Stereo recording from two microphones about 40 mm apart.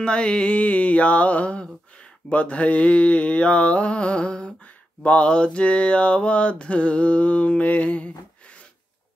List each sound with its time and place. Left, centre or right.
0.0 s mantra: left